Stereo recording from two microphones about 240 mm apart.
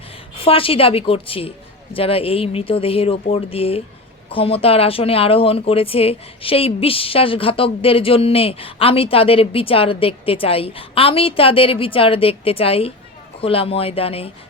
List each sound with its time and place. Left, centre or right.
0.3 s speech: left